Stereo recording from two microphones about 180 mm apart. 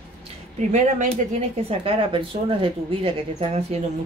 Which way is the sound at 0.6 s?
40° right (ahead or behind).